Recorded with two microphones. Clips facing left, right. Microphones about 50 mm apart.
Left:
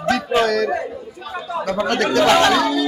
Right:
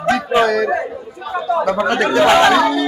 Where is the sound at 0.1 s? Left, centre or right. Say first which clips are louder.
Right 3 dB; centre.